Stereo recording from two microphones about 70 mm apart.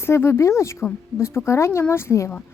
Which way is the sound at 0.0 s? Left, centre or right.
Left.